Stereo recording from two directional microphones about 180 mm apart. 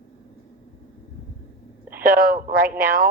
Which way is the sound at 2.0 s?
55° right (ahead or behind).